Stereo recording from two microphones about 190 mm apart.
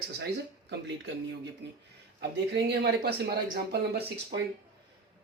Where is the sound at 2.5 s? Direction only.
60° right (ahead or behind).